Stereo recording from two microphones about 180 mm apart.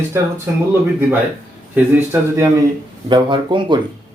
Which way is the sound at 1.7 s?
15° right (ahead or behind).